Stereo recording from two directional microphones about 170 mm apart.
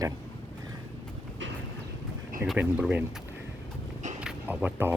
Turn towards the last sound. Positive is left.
turn(degrees=-10)  # may be behind; listen again after turning